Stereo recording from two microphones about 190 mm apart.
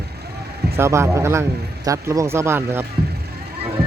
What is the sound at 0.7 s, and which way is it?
Speech, 15° right (ahead or behind).